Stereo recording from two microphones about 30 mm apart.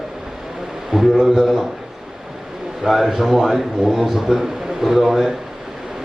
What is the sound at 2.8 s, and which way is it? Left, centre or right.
A man's voice, centre.